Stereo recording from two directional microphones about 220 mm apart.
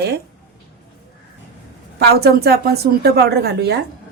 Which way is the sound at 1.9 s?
45° right (ahead or behind).